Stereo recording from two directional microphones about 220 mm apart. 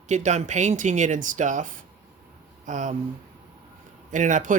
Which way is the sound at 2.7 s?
35° right (ahead or behind).